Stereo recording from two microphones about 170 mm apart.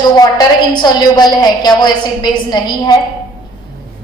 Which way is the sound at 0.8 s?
25° left (ahead or behind).